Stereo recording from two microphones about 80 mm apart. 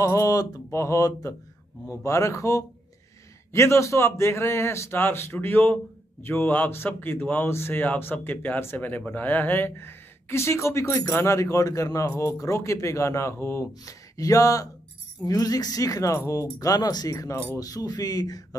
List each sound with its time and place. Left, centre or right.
0.0 s a man's voice: left
13.8 s speech: left